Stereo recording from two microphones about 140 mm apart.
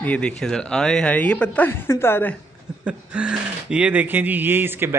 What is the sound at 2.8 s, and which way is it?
Speech, 10° right (ahead or behind).